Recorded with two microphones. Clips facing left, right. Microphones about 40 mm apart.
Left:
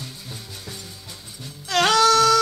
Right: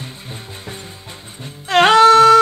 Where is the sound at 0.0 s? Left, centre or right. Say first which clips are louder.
Right 5 dB; right.